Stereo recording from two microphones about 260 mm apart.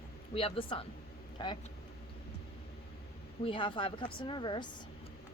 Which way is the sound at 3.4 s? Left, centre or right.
Centre.